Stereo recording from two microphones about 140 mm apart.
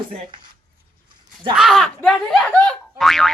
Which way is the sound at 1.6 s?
Centre (ahead or behind).